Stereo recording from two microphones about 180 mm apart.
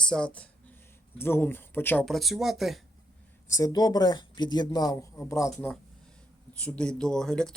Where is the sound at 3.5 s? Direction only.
20° left (ahead or behind).